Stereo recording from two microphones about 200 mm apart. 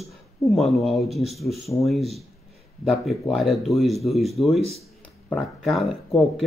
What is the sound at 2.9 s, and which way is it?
Speech, centre (ahead or behind).